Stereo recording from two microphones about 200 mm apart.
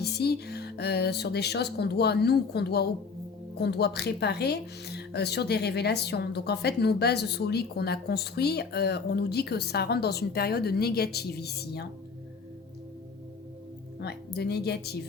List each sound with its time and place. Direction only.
0.0 s a woman's voice: 55° left (ahead or behind)
14.0 s a woman's voice: 55° left (ahead or behind)